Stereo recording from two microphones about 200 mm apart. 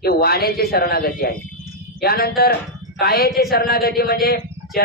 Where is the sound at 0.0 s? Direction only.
50° left (ahead or behind).